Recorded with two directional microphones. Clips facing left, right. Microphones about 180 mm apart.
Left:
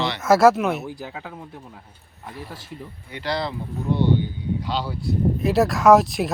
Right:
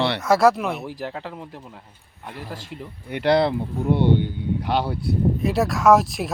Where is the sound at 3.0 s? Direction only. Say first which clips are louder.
Right 8 dB; 65° right (ahead or behind).